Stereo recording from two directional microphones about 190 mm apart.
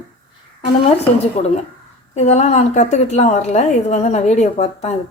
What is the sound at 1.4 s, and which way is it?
A woman's voice, 40° left (ahead or behind).